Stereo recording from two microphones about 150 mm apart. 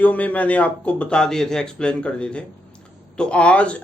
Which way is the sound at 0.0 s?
10° left (ahead or behind).